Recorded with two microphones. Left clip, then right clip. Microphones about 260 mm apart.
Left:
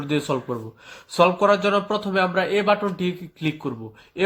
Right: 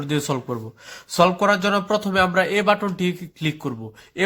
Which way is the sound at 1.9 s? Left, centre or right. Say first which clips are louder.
Right 2 dB; right.